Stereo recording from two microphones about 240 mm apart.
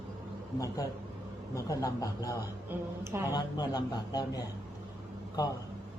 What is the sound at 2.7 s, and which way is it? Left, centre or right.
Speech, centre.